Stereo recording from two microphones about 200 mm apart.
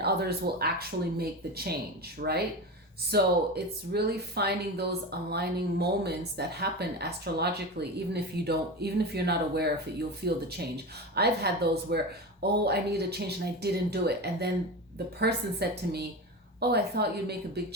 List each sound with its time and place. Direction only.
0.0 s speech: 55° right (ahead or behind)